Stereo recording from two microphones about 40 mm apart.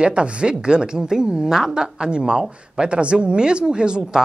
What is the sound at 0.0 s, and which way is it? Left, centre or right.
Speech, right.